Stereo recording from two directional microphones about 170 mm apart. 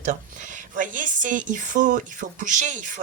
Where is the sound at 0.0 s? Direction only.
45° right (ahead or behind).